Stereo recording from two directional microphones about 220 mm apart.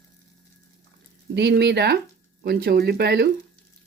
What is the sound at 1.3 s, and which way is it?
Speech, 50° right (ahead or behind).